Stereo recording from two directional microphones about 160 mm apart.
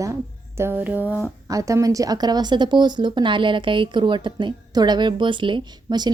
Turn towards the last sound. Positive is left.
turn(degrees=-30)  # may be behind; listen again after turning